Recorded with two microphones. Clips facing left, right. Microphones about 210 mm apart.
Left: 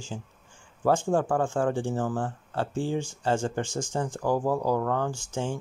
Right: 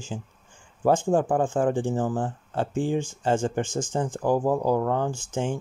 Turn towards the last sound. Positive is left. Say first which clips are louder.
# right 3 dB
turn(degrees=-20)  # may be behind; listen again after turning